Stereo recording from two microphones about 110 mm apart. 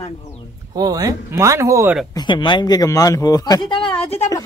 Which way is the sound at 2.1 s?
45° left (ahead or behind).